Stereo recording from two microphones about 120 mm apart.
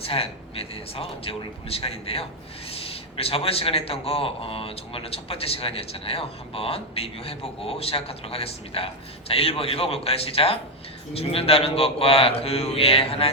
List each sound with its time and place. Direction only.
0.0 s a man's voice: 55° left (ahead or behind)